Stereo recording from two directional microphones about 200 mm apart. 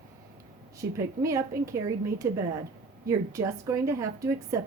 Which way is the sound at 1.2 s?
15° right (ahead or behind).